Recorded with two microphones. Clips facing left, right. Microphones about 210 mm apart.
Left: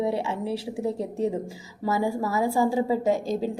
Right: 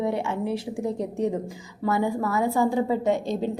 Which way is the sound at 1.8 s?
10° left (ahead or behind).